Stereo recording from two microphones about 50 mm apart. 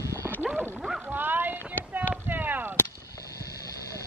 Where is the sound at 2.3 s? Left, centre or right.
Right.